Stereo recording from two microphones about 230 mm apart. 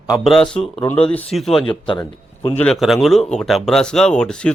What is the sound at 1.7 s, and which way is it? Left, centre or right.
Speech, left.